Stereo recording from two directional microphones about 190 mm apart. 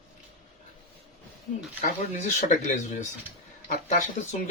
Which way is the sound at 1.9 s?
40° left (ahead or behind).